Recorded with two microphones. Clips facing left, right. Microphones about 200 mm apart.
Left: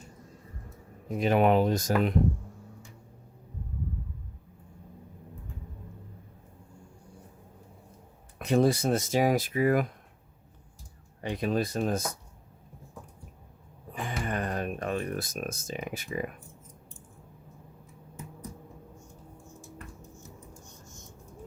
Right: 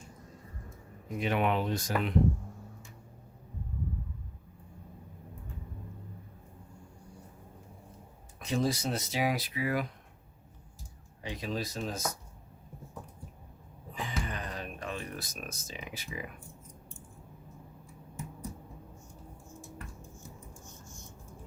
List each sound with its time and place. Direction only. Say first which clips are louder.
1.0 s speech: left 6 dB; 40° left (ahead or behind)
8.4 s speech: left 7 dB; 60° left (ahead or behind)
11.2 s speech: left 7 dB; 55° left (ahead or behind)
13.9 s a sound: left 5 dB; 55° left (ahead or behind)